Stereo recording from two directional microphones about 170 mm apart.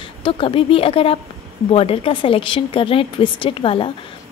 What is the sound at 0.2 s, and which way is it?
A woman's voice, 30° left (ahead or behind).